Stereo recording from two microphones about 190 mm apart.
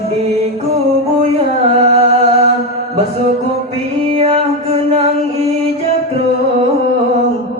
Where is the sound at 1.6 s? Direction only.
35° right (ahead or behind).